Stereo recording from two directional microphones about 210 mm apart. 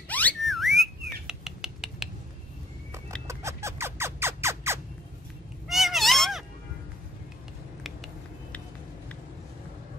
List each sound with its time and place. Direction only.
0.1 s bird: 5° left (ahead or behind)
3.3 s vehicle: 15° right (ahead or behind)
5.7 s cat: centre (ahead or behind)